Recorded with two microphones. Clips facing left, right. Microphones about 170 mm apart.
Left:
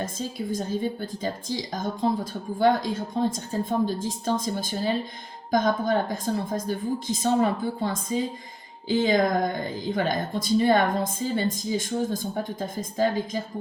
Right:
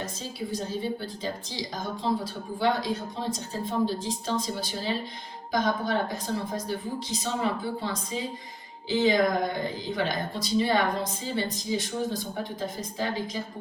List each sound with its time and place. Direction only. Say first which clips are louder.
0.0 s a woman's voice: left 4 dB; 50° left (ahead or behind)